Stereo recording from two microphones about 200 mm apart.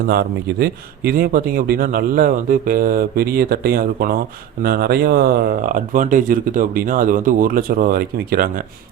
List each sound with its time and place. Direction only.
0.1 s a man's voice: 50° right (ahead or behind)